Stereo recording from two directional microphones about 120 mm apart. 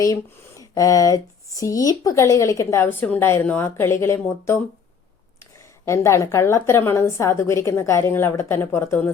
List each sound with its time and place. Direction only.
0.0 s speech: 30° left (ahead or behind)
5.8 s speech: 25° left (ahead or behind)